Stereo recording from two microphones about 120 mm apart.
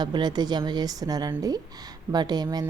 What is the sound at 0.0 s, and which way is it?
A woman's voice, 35° right (ahead or behind).